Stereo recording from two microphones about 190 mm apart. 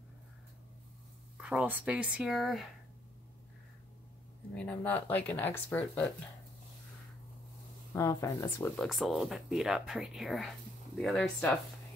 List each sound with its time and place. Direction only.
1.4 s speech: 5° right (ahead or behind)
4.6 s speech: 10° left (ahead or behind)
7.9 s speech: 15° left (ahead or behind)
8.7 s speech: centre (ahead or behind)